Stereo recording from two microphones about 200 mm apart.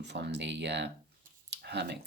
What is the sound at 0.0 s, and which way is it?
Speech, 60° right (ahead or behind).